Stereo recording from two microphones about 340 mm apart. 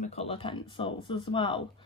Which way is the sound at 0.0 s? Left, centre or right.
Centre.